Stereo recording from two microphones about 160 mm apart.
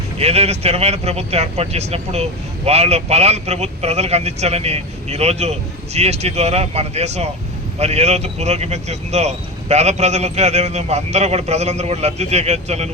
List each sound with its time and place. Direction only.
0.2 s speech: 40° right (ahead or behind)